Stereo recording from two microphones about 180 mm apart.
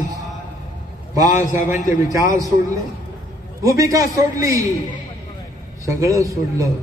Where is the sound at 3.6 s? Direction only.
20° right (ahead or behind).